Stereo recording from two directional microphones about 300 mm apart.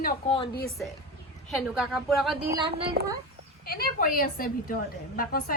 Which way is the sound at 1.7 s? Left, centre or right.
Centre.